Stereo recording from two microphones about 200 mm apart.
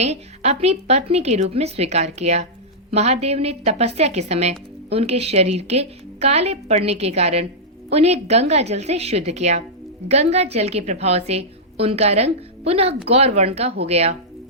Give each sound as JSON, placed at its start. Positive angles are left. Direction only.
{"t": 0.0, "sound": "a woman's voice", "side_deg": -35}